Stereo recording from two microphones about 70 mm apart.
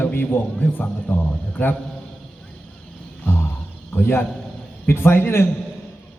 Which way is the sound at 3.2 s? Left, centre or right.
Left.